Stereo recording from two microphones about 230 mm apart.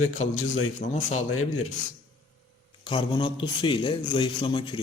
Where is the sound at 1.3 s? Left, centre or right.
Left.